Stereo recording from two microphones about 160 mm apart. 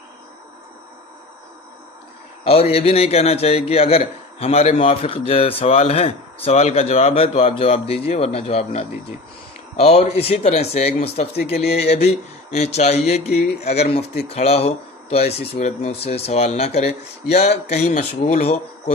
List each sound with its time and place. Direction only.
2.4 s a man's voice: 40° left (ahead or behind)